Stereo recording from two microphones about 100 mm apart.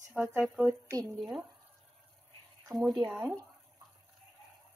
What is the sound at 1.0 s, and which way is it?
Speech, 35° right (ahead or behind).